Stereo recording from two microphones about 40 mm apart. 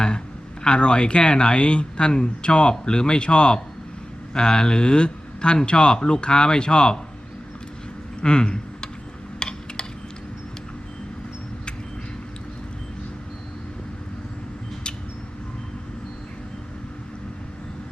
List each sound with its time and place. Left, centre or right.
0.6 s speech: left
8.2 s speech: left
9.4 s a sound: centre